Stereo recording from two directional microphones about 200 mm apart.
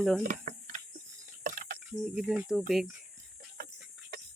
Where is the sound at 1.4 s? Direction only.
40° right (ahead or behind).